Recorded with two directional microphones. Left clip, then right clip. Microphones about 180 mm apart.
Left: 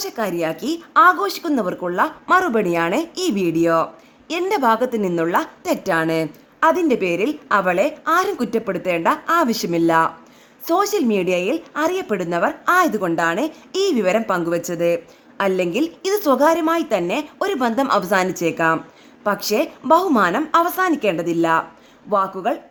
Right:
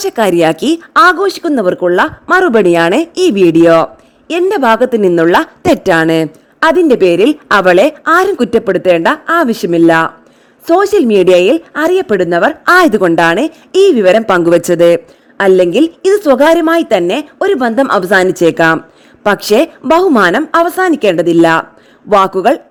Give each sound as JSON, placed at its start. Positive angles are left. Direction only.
{"t": 0.0, "sound": "a woman's voice", "side_deg": -50}